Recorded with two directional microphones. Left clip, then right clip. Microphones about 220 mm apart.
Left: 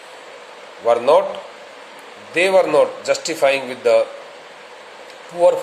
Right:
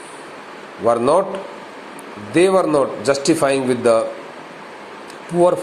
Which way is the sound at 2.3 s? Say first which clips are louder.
Even; 10° right (ahead or behind).